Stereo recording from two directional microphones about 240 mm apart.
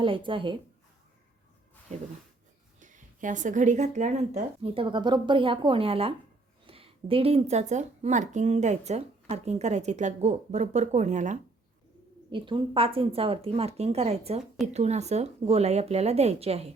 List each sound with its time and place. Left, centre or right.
0.0 s speech: right
2.8 s speech: right
12.3 s speech: right